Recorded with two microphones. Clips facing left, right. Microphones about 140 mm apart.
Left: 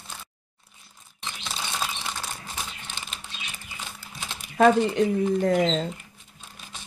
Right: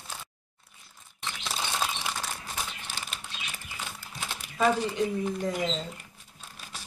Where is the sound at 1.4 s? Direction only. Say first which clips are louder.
Even; 5° right (ahead or behind).